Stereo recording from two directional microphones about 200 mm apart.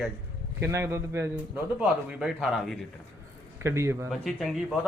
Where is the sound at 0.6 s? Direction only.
15° right (ahead or behind).